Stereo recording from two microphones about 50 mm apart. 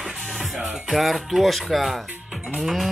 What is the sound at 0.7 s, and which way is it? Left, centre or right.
Speech, centre.